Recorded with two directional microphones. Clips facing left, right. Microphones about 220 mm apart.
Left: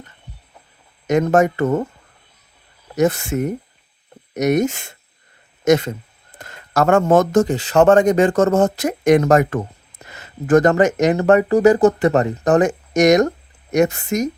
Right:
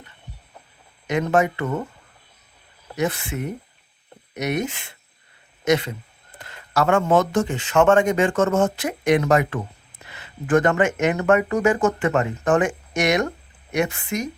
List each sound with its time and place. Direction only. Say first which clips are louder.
1.0 s speech: left 5 dB; 45° left (ahead or behind)
2.9 s speech: left 7 dB; 45° left (ahead or behind)